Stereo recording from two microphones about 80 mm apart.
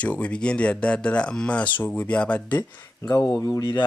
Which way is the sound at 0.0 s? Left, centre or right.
Centre.